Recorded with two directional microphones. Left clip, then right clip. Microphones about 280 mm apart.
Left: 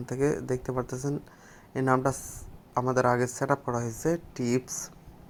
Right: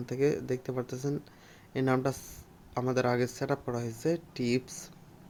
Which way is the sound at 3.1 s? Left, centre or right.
Centre.